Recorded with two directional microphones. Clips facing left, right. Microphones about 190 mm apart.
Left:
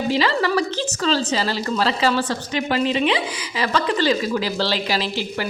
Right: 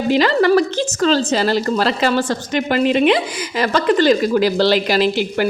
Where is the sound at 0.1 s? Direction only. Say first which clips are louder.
Right 8 dB; 55° right (ahead or behind).